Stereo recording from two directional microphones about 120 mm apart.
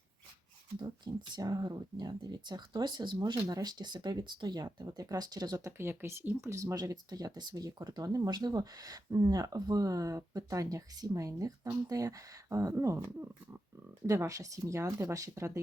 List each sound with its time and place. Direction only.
0.8 s speech: 35° right (ahead or behind)
5.5 s speech: 20° right (ahead or behind)